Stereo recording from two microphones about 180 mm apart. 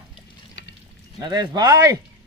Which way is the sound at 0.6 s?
75° left (ahead or behind).